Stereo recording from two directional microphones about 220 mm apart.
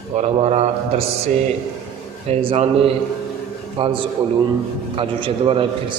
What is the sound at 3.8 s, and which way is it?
A man's voice, 25° right (ahead or behind).